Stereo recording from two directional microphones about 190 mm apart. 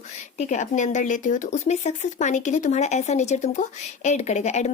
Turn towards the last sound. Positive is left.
turn(degrees=35)  # may be behind; listen again after turning